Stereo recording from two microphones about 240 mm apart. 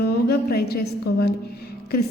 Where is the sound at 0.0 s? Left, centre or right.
Left.